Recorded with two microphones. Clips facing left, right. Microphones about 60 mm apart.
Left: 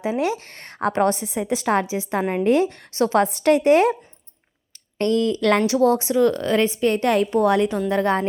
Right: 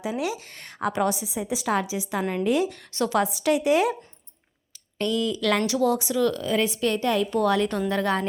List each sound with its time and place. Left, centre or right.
0.0 s a woman's voice: left
3.2 s a woman's voice: left
4.9 s a woman's voice: left
5.5 s speech: left
6.4 s a woman's voice: left
6.7 s speech: left
7.0 s a woman's voice: left
7.3 s a woman's voice: left